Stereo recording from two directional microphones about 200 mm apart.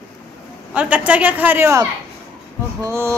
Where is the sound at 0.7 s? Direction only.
5° right (ahead or behind).